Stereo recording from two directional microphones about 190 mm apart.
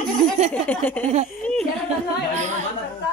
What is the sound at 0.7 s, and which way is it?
Speech, 10° left (ahead or behind).